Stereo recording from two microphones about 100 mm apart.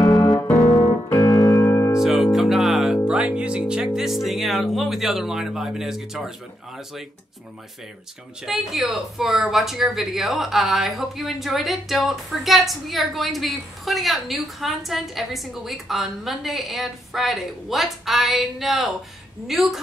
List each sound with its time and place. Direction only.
0.0 s music: 35° left (ahead or behind)
2.0 s music: 5° right (ahead or behind)
8.5 s speech: centre (ahead or behind)